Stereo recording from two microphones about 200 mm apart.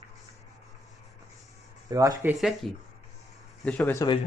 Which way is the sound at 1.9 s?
15° right (ahead or behind).